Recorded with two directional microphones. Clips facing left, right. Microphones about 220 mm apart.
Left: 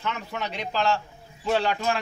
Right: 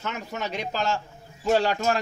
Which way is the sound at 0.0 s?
45° right (ahead or behind).